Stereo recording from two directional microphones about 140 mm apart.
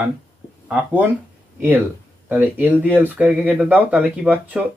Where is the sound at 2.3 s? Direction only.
10° right (ahead or behind).